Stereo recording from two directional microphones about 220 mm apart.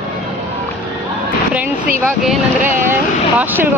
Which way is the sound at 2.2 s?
5° right (ahead or behind).